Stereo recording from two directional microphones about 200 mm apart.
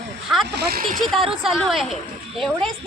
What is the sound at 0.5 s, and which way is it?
Speech, 50° right (ahead or behind).